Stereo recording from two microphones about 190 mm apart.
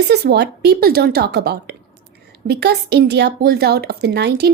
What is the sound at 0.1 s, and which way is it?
A woman's voice, 60° right (ahead or behind).